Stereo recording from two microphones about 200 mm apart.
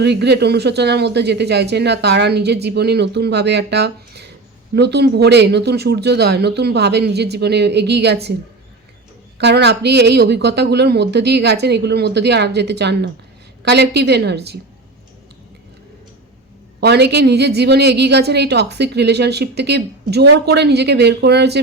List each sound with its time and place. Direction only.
0.0 s a woman's voice: 55° right (ahead or behind)
9.4 s a woman's voice: 60° right (ahead or behind)
16.8 s a woman's voice: 55° right (ahead or behind)